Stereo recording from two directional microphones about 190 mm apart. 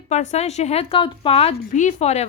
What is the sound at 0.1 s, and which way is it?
Speech, 35° left (ahead or behind).